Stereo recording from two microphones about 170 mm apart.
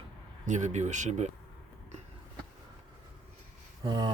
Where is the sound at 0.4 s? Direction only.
45° right (ahead or behind).